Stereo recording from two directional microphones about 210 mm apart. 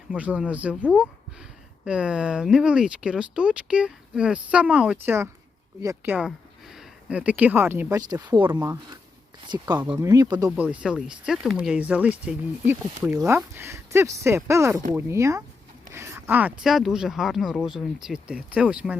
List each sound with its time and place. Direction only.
0.1 s speech: 5° right (ahead or behind)
6.1 s speech: centre (ahead or behind); by 10.5 s 20° right (ahead or behind)
10.5 s speech: 5° right (ahead or behind)